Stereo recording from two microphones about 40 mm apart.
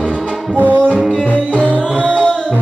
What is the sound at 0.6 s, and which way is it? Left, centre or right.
Music, right.